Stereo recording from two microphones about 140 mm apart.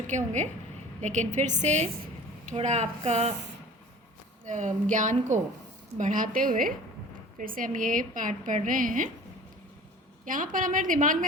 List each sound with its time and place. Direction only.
0.1 s a woman's voice: 60° right (ahead or behind)
4.4 s a woman's voice: 60° right (ahead or behind)
6.0 s a woman's voice: 75° right (ahead or behind)
10.2 s a woman's voice: 70° right (ahead or behind)